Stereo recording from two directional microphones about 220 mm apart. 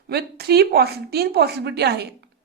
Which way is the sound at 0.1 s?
45° right (ahead or behind).